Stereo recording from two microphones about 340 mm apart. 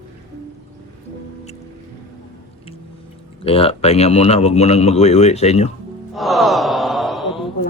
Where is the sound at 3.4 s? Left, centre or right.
Centre.